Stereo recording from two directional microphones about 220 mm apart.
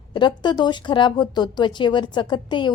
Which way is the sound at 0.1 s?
20° left (ahead or behind).